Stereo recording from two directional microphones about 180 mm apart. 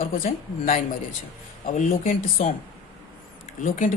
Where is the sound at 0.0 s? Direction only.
55° left (ahead or behind).